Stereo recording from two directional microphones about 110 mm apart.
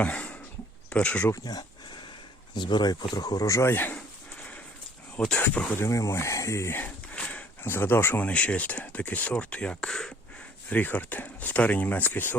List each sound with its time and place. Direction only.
0.0 s a sound: 10° left (ahead or behind)
0.9 s speech: 10° left (ahead or behind)
1.3 s speech: 35° left (ahead or behind); by 3.9 s 20° left (ahead or behind)
3.9 s a sound: 10° left (ahead or behind)
5.1 s speech: 10° left (ahead or behind)
5.8 s speech: 25° left (ahead or behind); by 10.2 s 5° left (ahead or behind)
10.7 s speech: 15° left (ahead or behind)